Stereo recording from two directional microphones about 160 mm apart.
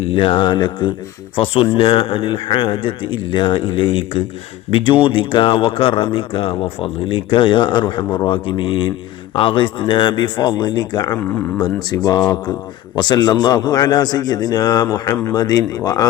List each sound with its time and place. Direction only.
0.0 s speech: 35° left (ahead or behind)